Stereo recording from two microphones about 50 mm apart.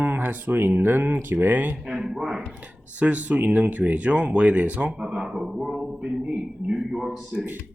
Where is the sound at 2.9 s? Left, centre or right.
Right.